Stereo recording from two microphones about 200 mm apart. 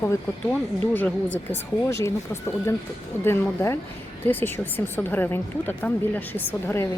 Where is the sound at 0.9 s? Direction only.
10° left (ahead or behind).